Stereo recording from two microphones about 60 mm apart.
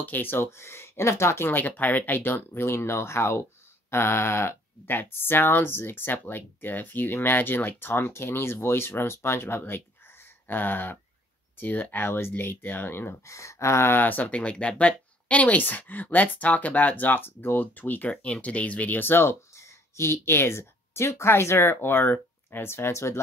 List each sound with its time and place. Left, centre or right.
0.0 s speech: left
0.5 s speech: left
1.8 s speech: left
13.2 s speech: left
19.5 s speech: left